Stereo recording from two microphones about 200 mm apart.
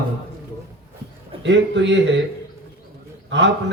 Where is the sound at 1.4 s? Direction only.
65° right (ahead or behind).